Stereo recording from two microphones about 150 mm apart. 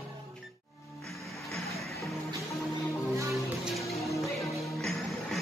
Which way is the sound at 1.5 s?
Centre (ahead or behind).